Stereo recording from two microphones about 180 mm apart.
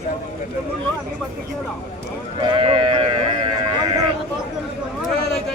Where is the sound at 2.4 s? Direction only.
30° right (ahead or behind).